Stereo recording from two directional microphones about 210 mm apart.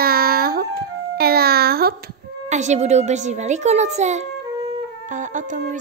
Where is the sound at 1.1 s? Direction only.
45° right (ahead or behind).